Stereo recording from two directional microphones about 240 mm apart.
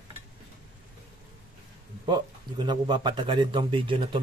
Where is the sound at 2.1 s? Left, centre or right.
Centre.